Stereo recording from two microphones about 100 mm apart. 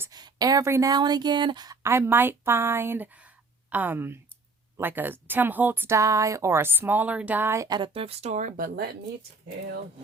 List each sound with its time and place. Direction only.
0.1 s a sound: 40° right (ahead or behind)
0.6 s speech: 30° right (ahead or behind)
0.9 s speech: 45° right (ahead or behind)
1.8 s speech: 25° right (ahead or behind)
6.0 s speech: 35° right (ahead or behind)
7.9 s speech: 80° right